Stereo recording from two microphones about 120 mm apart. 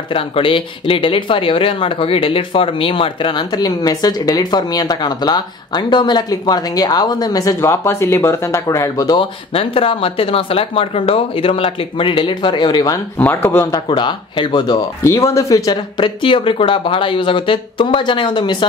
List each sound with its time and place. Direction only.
0.1 s speech: 45° left (ahead or behind); by 9.2 s 30° left (ahead or behind)
9.2 s speech: 50° left (ahead or behind); by 13.0 s 35° left (ahead or behind)
13.2 s speech: 15° left (ahead or behind)
13.7 s speech: 40° left (ahead or behind)
15.0 s speech: 25° left (ahead or behind)
16.0 s speech: 45° left (ahead or behind)